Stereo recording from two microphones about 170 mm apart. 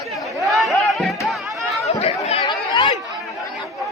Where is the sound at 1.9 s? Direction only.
35° left (ahead or behind).